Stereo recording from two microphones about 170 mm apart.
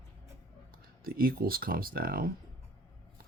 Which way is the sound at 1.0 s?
60° right (ahead or behind).